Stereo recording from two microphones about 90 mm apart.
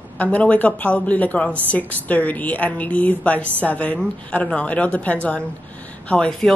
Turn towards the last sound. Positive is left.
turn(degrees=10)  # may be behind; listen again after turning